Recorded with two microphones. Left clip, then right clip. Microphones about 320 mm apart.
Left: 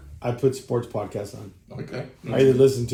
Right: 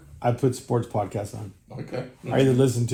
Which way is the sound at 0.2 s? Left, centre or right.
Right.